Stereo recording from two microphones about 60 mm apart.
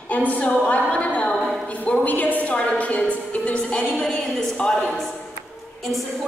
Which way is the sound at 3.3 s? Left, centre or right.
Left.